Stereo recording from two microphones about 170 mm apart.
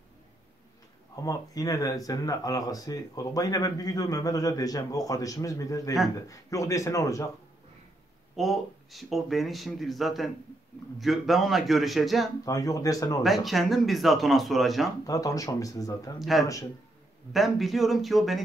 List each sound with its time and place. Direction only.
1.2 s speech: 20° left (ahead or behind)
8.4 s speech: centre (ahead or behind)
12.4 s speech: 20° left (ahead or behind)
13.2 s speech: centre (ahead or behind)
15.0 s speech: 20° left (ahead or behind)
16.2 s speech: centre (ahead or behind)